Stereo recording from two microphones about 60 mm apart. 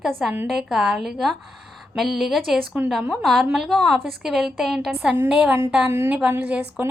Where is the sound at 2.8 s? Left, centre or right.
Centre.